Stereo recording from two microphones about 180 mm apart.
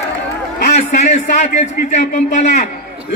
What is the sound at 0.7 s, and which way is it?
A man's voice, 40° left (ahead or behind).